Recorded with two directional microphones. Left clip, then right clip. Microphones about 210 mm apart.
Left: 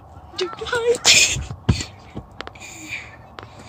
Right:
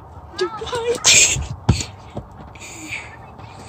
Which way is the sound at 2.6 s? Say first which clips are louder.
Right 4 dB; 10° right (ahead or behind).